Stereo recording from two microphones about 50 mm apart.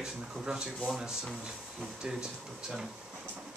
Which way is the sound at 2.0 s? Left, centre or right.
Centre.